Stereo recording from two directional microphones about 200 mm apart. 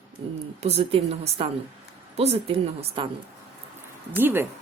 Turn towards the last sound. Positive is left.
turn(degrees=-10)  # may be behind; listen again after turning